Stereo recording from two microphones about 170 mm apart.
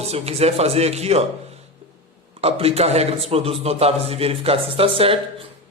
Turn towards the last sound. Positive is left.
turn(degrees=-30)  # may be behind; listen again after turning